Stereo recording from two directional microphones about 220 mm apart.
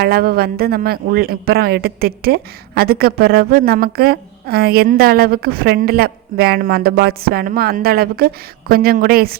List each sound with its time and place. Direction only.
0.0 s speech: 45° right (ahead or behind)